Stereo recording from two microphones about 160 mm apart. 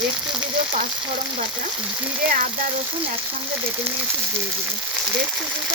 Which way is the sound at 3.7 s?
15° right (ahead or behind).